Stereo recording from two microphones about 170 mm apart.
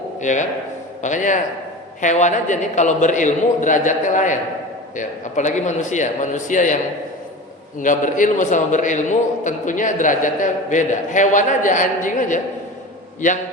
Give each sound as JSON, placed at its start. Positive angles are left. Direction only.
{"t": 0.2, "sound": "a man's voice", "side_deg": 45}
{"t": 7.8, "sound": "a man's voice", "side_deg": 50}